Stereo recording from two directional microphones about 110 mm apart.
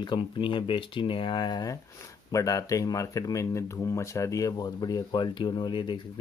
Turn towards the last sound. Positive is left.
turn(degrees=45)  # may be behind; listen again after turning